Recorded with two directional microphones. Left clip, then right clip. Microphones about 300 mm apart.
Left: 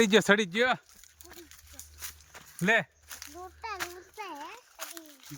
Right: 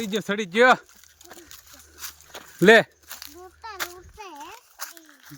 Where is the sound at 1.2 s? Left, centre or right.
Centre.